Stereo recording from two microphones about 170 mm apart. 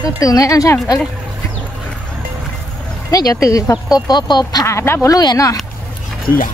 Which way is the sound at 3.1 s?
20° left (ahead or behind).